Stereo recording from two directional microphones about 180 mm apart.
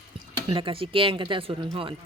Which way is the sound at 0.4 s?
30° right (ahead or behind).